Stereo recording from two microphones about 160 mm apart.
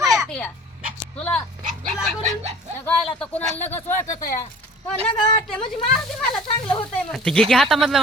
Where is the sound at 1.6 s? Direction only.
55° right (ahead or behind).